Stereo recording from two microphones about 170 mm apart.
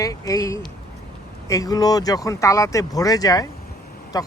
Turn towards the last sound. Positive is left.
turn(degrees=20)  # may be behind; listen again after turning